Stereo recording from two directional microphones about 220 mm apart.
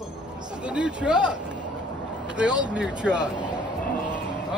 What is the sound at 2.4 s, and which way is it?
Speech, 5° right (ahead or behind).